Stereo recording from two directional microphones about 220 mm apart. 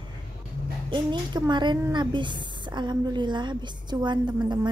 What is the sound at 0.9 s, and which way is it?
A woman's voice, 20° right (ahead or behind).